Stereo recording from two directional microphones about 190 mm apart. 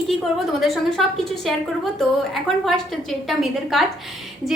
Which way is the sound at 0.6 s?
Centre (ahead or behind).